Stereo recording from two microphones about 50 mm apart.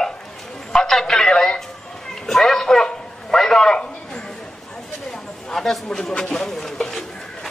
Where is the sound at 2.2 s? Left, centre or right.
Centre.